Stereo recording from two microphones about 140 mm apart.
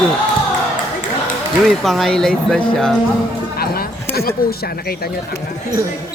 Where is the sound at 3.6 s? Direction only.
90° left.